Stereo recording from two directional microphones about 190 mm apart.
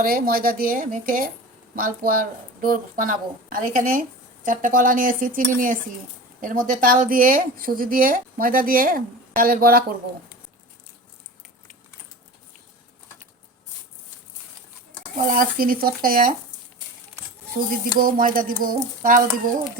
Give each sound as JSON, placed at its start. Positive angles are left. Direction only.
{"t": 0.0, "sound": "a woman's voice", "side_deg": -50}
{"t": 15.4, "sound": "a woman's voice", "side_deg": -50}
{"t": 18.0, "sound": "a woman's voice", "side_deg": -45}